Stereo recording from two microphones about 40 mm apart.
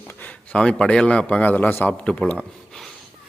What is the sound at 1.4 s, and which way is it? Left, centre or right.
Speech, left.